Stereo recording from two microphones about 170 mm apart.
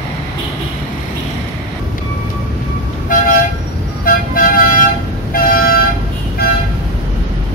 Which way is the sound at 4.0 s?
55° left (ahead or behind).